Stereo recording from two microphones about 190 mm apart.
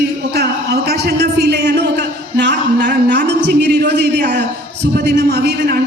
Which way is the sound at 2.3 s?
65° right (ahead or behind).